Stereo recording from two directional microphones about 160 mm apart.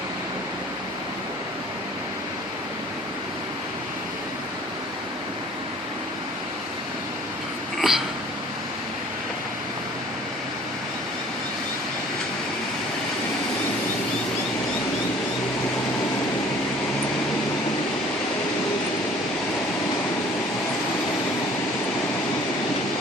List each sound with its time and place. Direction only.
7.8 s hiccup: centre (ahead or behind)